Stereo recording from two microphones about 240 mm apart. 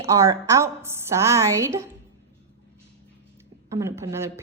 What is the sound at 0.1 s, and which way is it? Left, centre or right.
A woman's voice, centre.